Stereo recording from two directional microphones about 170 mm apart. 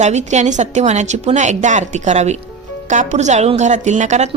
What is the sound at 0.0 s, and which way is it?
A woman's voice, 45° right (ahead or behind).